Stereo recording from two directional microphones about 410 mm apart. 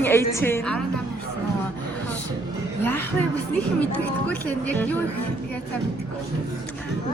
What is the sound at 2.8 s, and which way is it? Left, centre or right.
Speech, centre.